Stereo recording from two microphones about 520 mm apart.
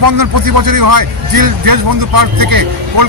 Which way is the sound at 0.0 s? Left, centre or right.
Right.